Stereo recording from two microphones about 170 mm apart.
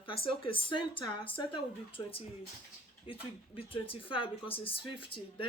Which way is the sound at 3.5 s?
30° left (ahead or behind).